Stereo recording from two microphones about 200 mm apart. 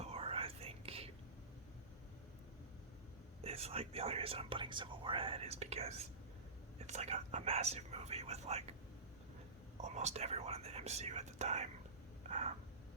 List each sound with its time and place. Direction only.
0.0 s whispering: 30° right (ahead or behind)
3.4 s speech: 30° right (ahead or behind)
9.8 s speech: 35° right (ahead or behind)